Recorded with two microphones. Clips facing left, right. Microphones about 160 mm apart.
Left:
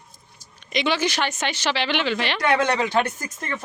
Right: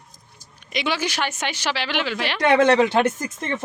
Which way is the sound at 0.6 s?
10° right (ahead or behind).